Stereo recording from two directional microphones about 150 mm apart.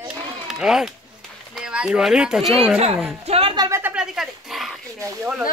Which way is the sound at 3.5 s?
25° right (ahead or behind).